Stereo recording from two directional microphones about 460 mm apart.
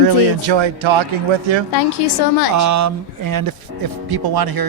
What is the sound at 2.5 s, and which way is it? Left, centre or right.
Speech, right.